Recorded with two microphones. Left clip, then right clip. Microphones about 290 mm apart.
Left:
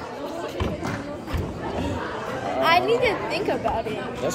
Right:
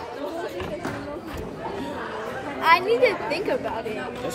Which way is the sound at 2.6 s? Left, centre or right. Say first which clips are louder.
Right 1 dB; centre.